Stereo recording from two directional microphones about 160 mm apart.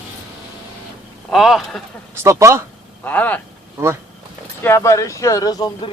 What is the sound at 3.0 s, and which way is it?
Speech, 10° left (ahead or behind).